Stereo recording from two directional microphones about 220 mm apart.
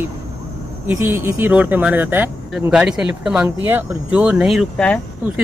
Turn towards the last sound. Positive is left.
turn(degrees=5)  # may be behind; listen again after turning